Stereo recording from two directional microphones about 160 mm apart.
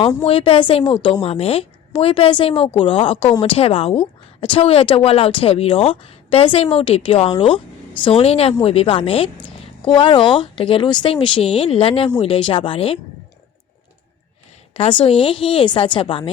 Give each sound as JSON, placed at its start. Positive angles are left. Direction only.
{"t": 0.3, "sound": "a woman's voice", "side_deg": 35}
{"t": 14.7, "sound": "a woman's voice", "side_deg": 35}